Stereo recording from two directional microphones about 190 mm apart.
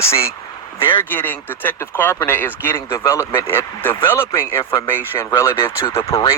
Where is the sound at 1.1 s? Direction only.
10° left (ahead or behind).